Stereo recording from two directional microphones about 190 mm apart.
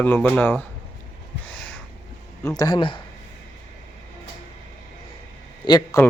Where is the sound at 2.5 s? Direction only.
20° left (ahead or behind).